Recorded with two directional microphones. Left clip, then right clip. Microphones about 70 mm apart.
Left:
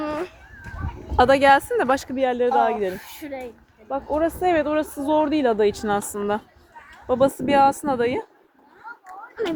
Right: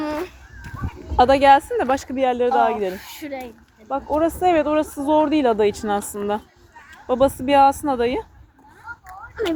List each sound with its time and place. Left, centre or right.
0.0 s a sound: left
1.1 s speech: left
2.0 s speech: centre
4.5 s a woman's voice: centre
6.1 s a woman's voice: centre
7.1 s speech: centre